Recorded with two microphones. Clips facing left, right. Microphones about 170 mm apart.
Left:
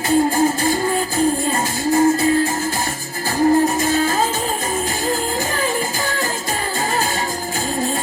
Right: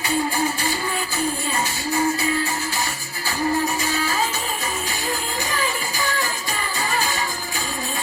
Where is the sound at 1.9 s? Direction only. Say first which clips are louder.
Left 8 dB; 45° left (ahead or behind).